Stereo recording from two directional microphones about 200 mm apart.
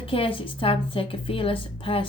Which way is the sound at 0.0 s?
25° left (ahead or behind).